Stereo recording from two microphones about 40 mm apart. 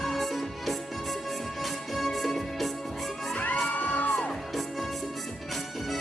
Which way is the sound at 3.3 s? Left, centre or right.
Left.